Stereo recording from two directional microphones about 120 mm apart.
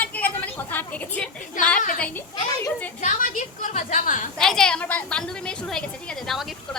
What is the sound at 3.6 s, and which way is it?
Speech, 90° left.